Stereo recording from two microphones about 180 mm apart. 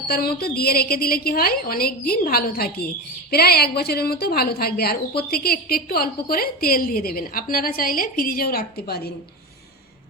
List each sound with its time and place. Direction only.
0.1 s a woman's voice: 60° left (ahead or behind)